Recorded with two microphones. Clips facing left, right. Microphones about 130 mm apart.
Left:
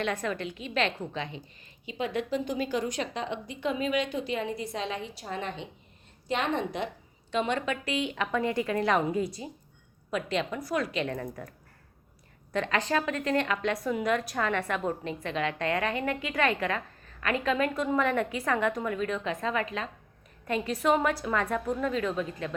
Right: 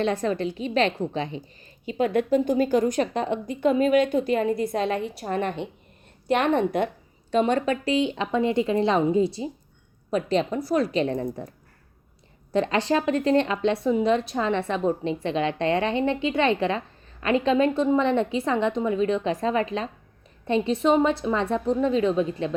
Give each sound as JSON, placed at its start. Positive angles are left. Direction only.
{"t": 0.0, "sound": "a woman's voice", "side_deg": -30}
{"t": 1.8, "sound": "a woman's voice", "side_deg": -45}
{"t": 12.5, "sound": "a woman's voice", "side_deg": -30}